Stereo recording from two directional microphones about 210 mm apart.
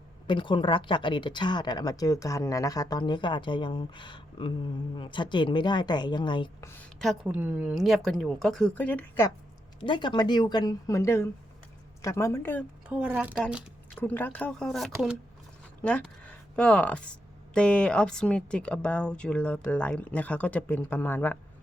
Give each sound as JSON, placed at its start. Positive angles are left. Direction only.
{"t": 0.3, "sound": "speech", "side_deg": 25}
{"t": 6.7, "sound": "speech", "side_deg": 5}
{"t": 9.8, "sound": "a woman's voice", "side_deg": 20}
{"t": 12.9, "sound": "speech", "side_deg": -5}